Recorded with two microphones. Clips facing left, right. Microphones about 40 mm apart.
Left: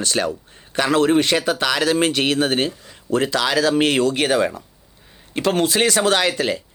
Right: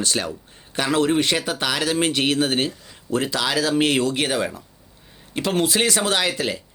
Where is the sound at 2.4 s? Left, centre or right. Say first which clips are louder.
Left 2 dB; left.